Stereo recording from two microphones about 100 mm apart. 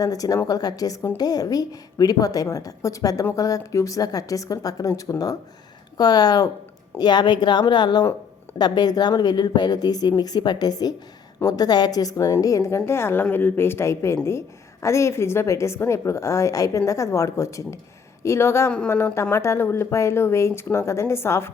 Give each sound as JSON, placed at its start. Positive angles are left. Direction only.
{"t": 0.0, "sound": "a woman's voice", "side_deg": 35}